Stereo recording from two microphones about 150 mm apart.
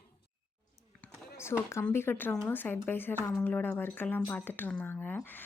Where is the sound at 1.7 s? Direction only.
15° left (ahead or behind).